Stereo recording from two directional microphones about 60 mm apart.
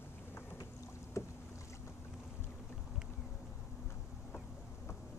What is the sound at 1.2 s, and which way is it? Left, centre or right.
Boat, left.